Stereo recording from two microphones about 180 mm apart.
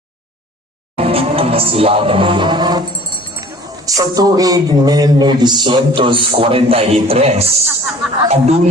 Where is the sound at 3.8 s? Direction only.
20° right (ahead or behind).